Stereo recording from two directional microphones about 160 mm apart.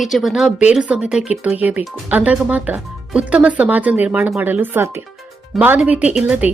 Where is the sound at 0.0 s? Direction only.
Centre (ahead or behind).